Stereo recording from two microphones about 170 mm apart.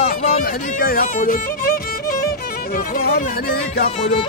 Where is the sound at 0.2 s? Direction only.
50° left (ahead or behind).